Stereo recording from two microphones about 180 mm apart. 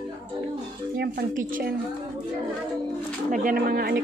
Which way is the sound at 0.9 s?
60° right (ahead or behind).